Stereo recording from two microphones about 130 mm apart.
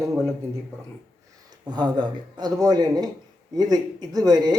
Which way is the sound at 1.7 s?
35° right (ahead or behind).